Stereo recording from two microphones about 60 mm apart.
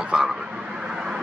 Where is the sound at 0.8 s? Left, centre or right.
Centre.